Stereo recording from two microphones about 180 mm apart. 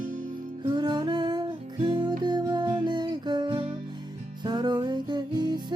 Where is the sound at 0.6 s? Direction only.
25° right (ahead or behind).